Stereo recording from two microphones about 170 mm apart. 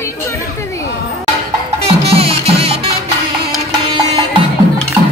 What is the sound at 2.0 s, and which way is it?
Music, 35° right (ahead or behind).